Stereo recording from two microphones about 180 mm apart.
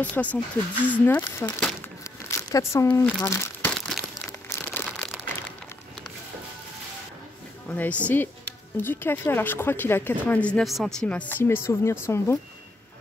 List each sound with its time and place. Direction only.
0.0 s a woman's voice: 10° left (ahead or behind)
1.8 s crumpling: 15° left (ahead or behind)
3.7 s crumpling: 5° left (ahead or behind)
4.3 s crumpling: 15° left (ahead or behind)
7.7 s a woman's voice: 10° left (ahead or behind)